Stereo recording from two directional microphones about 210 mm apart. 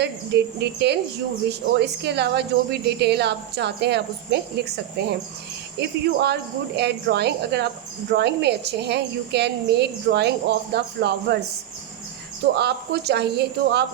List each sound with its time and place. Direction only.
0.0 s speech: 50° right (ahead or behind)
12.5 s speech: 50° right (ahead or behind)